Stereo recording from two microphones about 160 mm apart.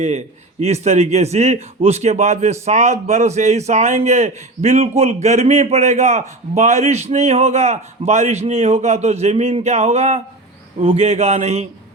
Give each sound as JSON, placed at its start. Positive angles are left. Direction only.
{"t": 0.6, "sound": "a man's voice", "side_deg": -45}